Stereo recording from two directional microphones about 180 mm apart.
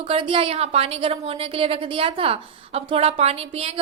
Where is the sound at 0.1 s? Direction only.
30° right (ahead or behind).